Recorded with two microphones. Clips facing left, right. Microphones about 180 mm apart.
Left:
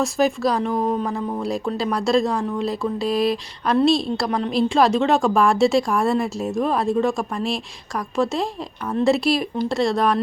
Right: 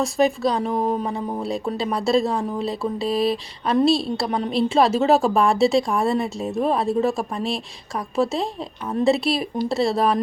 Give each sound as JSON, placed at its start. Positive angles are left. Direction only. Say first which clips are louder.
{"t": 0.0, "sound": "a woman's voice", "louder": "even", "side_deg": 0}
{"t": 1.0, "sound": "speech", "louder": "left 1 dB", "side_deg": -25}
{"t": 1.5, "sound": "a woman's voice", "louder": "left 1 dB", "side_deg": 0}